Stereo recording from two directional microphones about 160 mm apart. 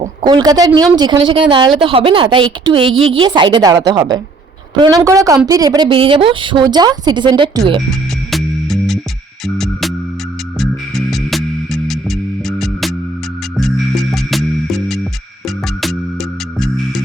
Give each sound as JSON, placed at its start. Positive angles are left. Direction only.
{"t": 0.2, "sound": "a woman's voice", "side_deg": -25}
{"t": 8.3, "sound": "music", "side_deg": 0}
{"t": 10.6, "sound": "music", "side_deg": 0}